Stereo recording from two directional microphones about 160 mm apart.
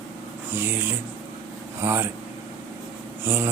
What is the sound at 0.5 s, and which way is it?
Speech, 15° right (ahead or behind).